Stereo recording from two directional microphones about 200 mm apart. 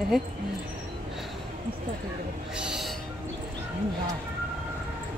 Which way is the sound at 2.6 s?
Centre (ahead or behind).